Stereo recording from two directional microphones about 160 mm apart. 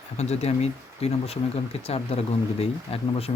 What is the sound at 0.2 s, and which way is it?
Speech, 40° left (ahead or behind).